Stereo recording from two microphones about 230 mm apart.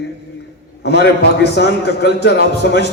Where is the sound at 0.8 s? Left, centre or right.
Left.